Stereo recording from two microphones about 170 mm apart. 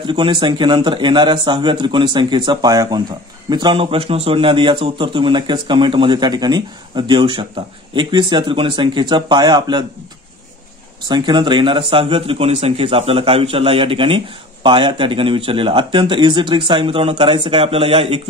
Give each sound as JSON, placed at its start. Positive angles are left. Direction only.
{"t": 0.0, "sound": "a man's voice", "side_deg": -30}
{"t": 11.1, "sound": "speech", "side_deg": -25}